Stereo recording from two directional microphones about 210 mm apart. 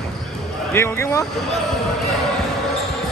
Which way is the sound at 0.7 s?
10° left (ahead or behind).